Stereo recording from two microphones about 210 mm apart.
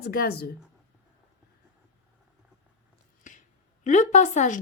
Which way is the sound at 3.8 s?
35° left (ahead or behind).